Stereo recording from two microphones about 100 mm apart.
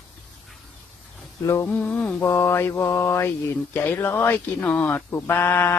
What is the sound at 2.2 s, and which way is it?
Mantra, 25° left (ahead or behind).